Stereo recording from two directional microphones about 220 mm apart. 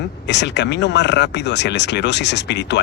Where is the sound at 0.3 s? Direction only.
50° left (ahead or behind).